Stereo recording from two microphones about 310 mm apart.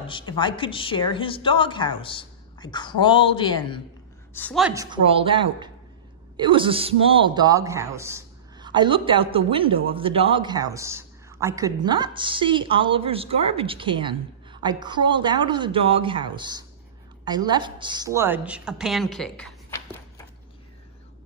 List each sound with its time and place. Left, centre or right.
0.0 s a woman's voice: centre
4.8 s a woman's voice: centre